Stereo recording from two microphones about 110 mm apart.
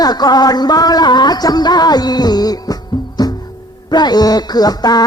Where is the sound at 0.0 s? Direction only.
40° left (ahead or behind).